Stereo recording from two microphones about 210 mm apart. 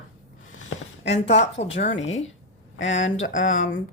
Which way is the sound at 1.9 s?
65° left (ahead or behind).